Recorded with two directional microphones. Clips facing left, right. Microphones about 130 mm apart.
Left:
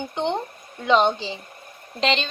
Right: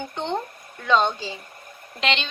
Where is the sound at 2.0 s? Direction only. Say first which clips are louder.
Left 3 dB; 35° left (ahead or behind).